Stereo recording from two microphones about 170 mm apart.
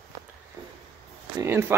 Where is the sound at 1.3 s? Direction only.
15° right (ahead or behind).